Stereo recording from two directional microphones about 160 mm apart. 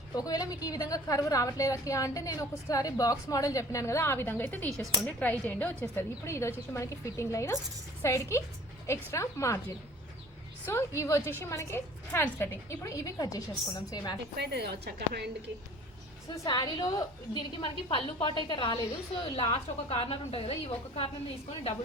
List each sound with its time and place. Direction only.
0.1 s a woman's voice: 25° left (ahead or behind)
4.8 s speech: centre (ahead or behind)
5.2 s a woman's voice: 10° left (ahead or behind)
10.7 s a woman's voice: 15° left (ahead or behind)
14.3 s a woman's voice: 90° right
16.3 s a woman's voice: 25° left (ahead or behind)